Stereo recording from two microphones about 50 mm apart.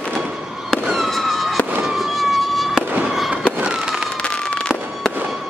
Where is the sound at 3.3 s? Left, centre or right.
Right.